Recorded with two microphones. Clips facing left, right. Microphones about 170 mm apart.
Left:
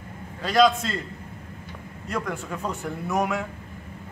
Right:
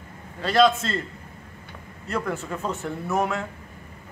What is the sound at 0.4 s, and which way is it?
Speech, centre (ahead or behind).